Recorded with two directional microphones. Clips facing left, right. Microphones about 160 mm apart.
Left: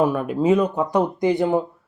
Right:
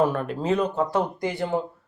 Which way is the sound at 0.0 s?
10° left (ahead or behind).